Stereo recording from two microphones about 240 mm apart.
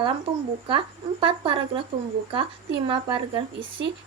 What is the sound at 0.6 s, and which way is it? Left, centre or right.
A woman's voice, right.